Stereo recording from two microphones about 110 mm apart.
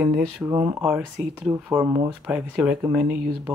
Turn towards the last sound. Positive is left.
turn(degrees=-10)  # may be behind; listen again after turning